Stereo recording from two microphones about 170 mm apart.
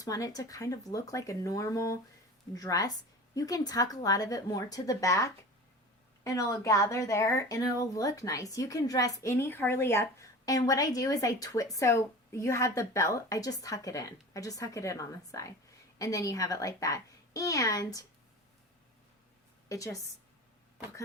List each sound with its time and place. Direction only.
0.0 s a woman's voice: 20° left (ahead or behind)
19.6 s a woman's voice: 20° left (ahead or behind)